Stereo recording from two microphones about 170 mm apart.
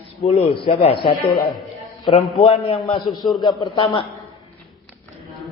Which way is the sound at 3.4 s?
25° left (ahead or behind).